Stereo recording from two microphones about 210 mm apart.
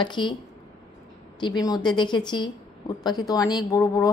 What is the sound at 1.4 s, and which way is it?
A woman's voice, 20° left (ahead or behind).